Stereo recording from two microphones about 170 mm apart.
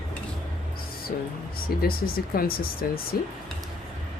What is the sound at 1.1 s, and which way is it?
Speech, 50° left (ahead or behind).